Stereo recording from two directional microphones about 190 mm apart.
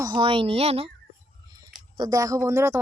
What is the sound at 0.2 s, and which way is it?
Speech, 25° right (ahead or behind).